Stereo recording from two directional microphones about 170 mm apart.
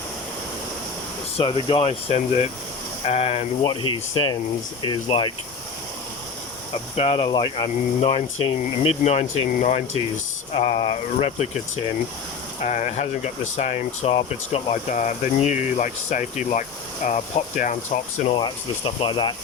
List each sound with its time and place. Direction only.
1.4 s speech: 30° left (ahead or behind)
6.9 s speech: 35° left (ahead or behind)
19.0 s speech: 30° left (ahead or behind)